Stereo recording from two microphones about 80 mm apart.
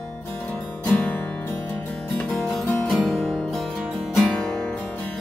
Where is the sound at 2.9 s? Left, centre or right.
Centre.